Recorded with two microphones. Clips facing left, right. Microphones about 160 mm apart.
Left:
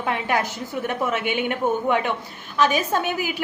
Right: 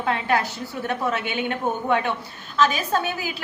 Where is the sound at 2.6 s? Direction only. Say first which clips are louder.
Left 1 dB; 15° left (ahead or behind).